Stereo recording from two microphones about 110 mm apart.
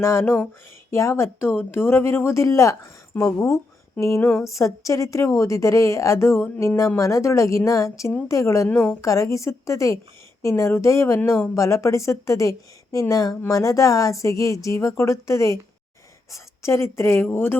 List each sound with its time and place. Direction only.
0.0 s a woman's voice: 25° left (ahead or behind)
4.3 s a sound: 5° left (ahead or behind)
4.5 s a woman's voice: 30° left (ahead or behind)